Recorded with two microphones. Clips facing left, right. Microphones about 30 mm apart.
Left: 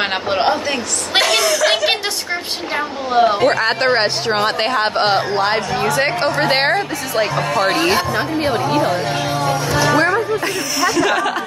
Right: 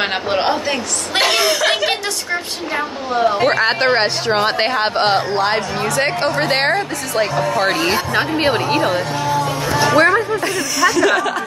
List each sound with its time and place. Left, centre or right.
0.0 s a woman's voice: centre
1.2 s speech: right
3.1 s speech: left
3.4 s a woman's voice: centre
4.5 s a woman's voice: centre
8.2 s a woman's voice: right
9.9 s chatter: right
10.4 s a woman's voice: centre